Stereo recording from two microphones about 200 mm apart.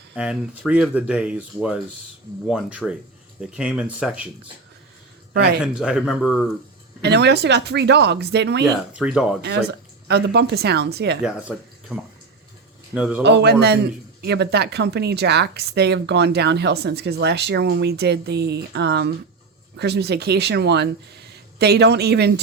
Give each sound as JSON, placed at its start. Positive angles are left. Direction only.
{"t": 0.2, "sound": "speech", "side_deg": -5}
{"t": 5.3, "sound": "speech", "side_deg": -55}
{"t": 5.6, "sound": "speech", "side_deg": -5}
{"t": 7.0, "sound": "speech", "side_deg": -55}
{"t": 8.6, "sound": "speech", "side_deg": -5}
{"t": 9.4, "sound": "speech", "side_deg": -55}
{"t": 11.2, "sound": "speech", "side_deg": -5}
{"t": 13.2, "sound": "speech", "side_deg": -55}